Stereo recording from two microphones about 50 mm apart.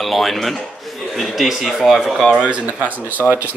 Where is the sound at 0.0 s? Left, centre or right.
Centre.